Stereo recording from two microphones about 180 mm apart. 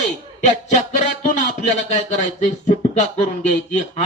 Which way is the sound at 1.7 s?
40° left (ahead or behind).